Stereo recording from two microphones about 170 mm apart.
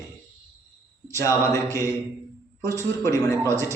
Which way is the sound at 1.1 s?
15° left (ahead or behind).